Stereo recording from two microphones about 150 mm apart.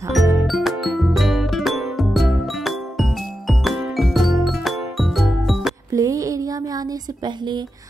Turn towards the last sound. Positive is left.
turn(degrees=-30)  # may be behind; listen again after turning